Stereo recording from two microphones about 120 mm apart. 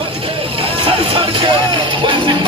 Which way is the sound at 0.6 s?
50° right (ahead or behind).